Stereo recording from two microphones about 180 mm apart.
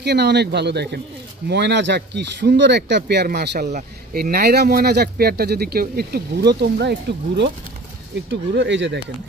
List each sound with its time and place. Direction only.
0.0 s speech: 70° right (ahead or behind)
8.3 s speech: 90° right